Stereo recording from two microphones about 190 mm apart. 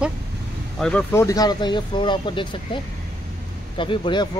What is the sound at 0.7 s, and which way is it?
Speech, 5° left (ahead or behind).